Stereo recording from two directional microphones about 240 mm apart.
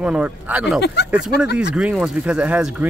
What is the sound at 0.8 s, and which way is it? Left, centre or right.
Speech, left.